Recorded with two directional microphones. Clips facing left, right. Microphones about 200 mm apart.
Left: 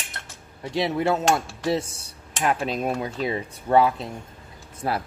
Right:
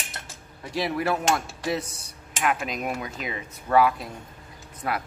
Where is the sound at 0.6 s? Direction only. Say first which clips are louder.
Left 3 dB; 25° left (ahead or behind).